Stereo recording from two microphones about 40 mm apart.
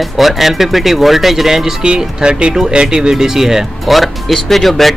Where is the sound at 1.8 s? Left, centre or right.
Right.